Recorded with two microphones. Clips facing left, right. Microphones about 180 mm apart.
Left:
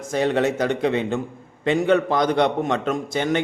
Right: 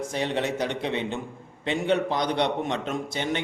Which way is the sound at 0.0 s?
45° left (ahead or behind).